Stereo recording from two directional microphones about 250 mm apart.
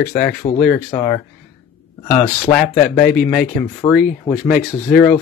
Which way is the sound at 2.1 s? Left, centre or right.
Centre.